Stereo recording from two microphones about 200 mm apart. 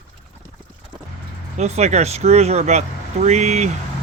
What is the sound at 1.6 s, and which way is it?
Speech, 35° right (ahead or behind).